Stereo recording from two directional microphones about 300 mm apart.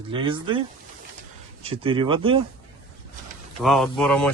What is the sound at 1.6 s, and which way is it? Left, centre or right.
Speech, centre.